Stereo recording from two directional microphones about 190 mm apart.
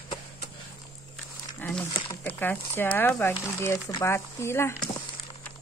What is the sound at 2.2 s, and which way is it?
Speech, 10° left (ahead or behind).